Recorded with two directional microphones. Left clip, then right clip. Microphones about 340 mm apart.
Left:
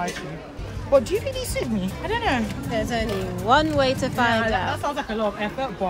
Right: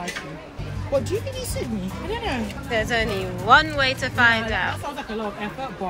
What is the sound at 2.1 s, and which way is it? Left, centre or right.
Speech, centre.